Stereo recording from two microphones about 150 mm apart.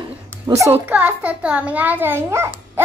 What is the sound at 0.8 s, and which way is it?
A child's voice, 10° right (ahead or behind).